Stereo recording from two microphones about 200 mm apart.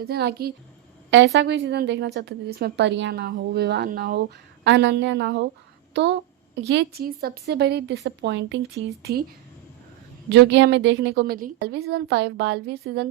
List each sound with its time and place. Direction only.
0.0 s a woman's voice: 55° right (ahead or behind)
1.1 s a woman's voice: 65° right (ahead or behind)
9.1 s a woman's voice: 50° right (ahead or behind)
10.2 s a woman's voice: 60° right (ahead or behind)